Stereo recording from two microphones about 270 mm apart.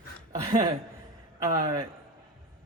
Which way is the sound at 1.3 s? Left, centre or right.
Centre.